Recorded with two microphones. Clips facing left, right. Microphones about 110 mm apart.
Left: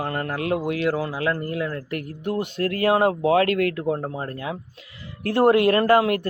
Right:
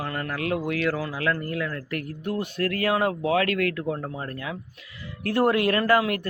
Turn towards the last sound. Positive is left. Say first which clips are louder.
# left 4 dB
turn(degrees=30)  # may be behind; listen again after turning